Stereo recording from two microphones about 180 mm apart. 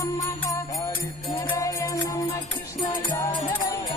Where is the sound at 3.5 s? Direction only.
15° left (ahead or behind).